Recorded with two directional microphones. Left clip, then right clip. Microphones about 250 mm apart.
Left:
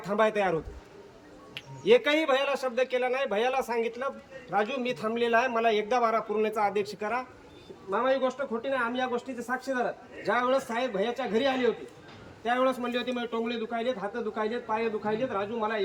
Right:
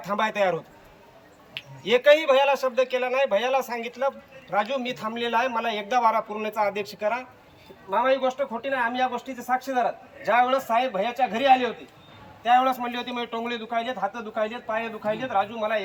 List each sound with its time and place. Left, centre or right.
0.0 s a man's voice: centre
1.8 s a man's voice: centre